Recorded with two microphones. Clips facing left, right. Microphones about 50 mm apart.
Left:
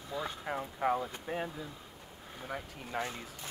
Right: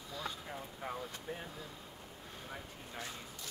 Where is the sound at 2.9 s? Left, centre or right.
Left.